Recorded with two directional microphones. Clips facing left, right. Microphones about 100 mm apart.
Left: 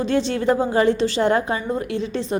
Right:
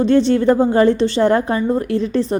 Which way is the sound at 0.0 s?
35° right (ahead or behind).